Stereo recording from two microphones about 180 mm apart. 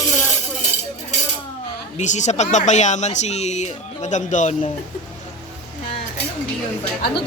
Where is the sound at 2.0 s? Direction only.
40° left (ahead or behind).